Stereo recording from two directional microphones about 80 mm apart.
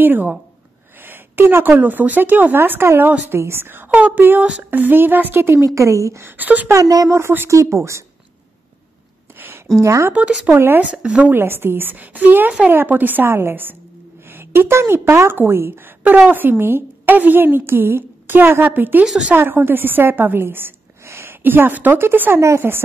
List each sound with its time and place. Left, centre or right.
0.0 s speech: right
5.8 s speech: right
6.2 s speech: right
6.7 s speech: right
7.2 s speech: right
9.8 s speech: right
10.4 s speech: right
10.9 s speech: centre
11.3 s speech: right
19.0 s speech: centre
19.3 s a woman's voice: right